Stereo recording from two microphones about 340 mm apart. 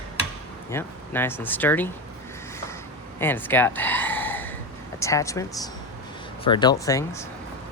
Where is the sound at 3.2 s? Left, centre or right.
Centre.